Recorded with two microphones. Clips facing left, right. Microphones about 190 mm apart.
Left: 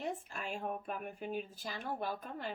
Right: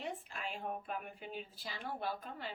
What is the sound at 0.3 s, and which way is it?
Speech, 45° left (ahead or behind).